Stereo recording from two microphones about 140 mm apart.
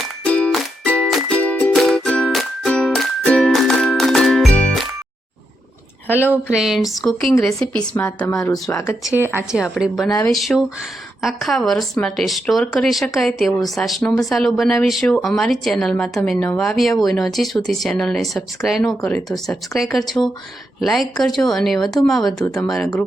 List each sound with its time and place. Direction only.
0.0 s music: 10° left (ahead or behind)
6.1 s speech: 15° left (ahead or behind)
6.3 s speech: 5° right (ahead or behind)
8.0 s speech: 25° left (ahead or behind)
9.1 s speech: 15° right (ahead or behind)
9.7 s speech: centre (ahead or behind)